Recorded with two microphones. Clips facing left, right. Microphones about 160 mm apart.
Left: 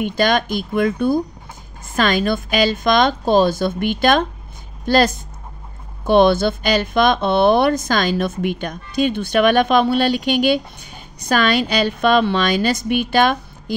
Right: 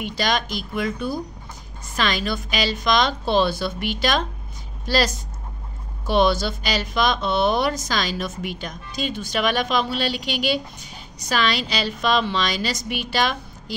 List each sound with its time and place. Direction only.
0.0 s a woman's voice: 50° left (ahead or behind)